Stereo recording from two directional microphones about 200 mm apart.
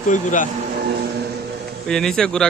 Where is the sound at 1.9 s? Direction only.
Centre (ahead or behind).